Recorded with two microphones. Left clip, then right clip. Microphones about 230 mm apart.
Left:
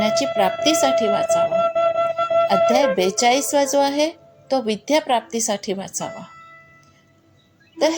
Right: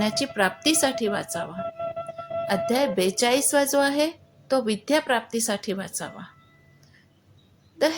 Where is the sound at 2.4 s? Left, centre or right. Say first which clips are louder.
Left 4 dB; centre.